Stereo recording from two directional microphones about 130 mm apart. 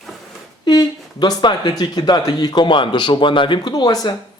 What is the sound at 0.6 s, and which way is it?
A man's voice, 30° left (ahead or behind).